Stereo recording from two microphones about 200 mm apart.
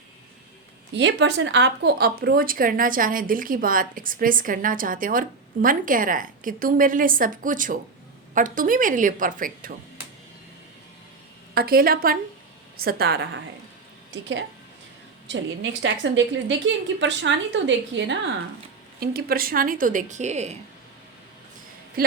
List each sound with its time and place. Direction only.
0.9 s speech: 65° right (ahead or behind); by 9.7 s 45° right (ahead or behind)
11.5 s speech: 50° right (ahead or behind)
14.1 s a woman's voice: 65° right (ahead or behind)
18.9 s speech: 50° right (ahead or behind)
22.0 s speech: 50° right (ahead or behind)